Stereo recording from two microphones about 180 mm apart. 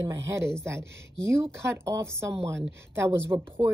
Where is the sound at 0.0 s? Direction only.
15° right (ahead or behind).